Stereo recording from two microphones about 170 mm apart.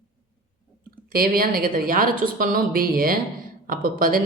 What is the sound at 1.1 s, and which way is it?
A woman's voice, 60° right (ahead or behind).